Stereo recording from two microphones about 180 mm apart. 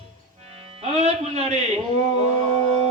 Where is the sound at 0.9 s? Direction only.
35° right (ahead or behind).